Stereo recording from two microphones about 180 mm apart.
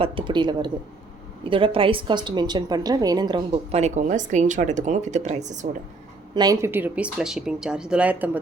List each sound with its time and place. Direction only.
0.0 s a woman's voice: 30° right (ahead or behind)
6.3 s speech: 20° right (ahead or behind)